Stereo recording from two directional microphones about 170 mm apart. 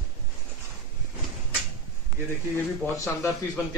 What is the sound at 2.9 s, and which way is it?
Speech, 15° left (ahead or behind).